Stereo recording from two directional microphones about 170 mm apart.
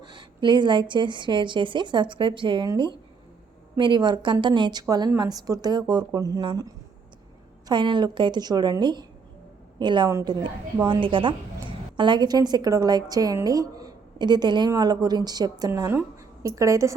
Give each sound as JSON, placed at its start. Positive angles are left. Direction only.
{"t": 0.0, "sound": "a woman's voice", "side_deg": -25}
{"t": 7.7, "sound": "a woman's voice", "side_deg": -30}